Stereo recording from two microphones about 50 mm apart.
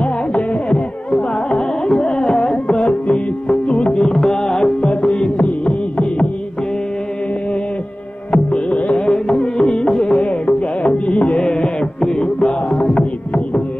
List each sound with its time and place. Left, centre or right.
0.0 s carnatic music: left
8.3 s music: left